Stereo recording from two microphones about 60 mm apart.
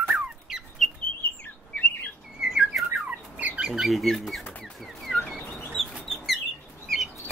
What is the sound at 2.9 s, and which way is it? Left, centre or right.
Squawk, right.